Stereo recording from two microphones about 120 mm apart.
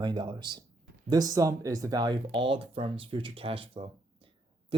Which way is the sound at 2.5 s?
50° right (ahead or behind).